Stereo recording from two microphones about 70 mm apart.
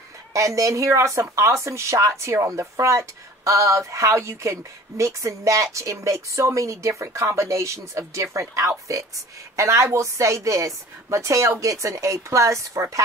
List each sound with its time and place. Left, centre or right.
0.3 s a woman's voice: right